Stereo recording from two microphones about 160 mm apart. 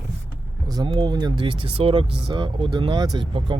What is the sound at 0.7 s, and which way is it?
Speech, 25° right (ahead or behind).